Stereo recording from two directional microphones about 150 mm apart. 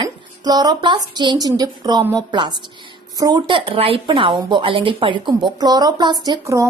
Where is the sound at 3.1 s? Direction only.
25° right (ahead or behind).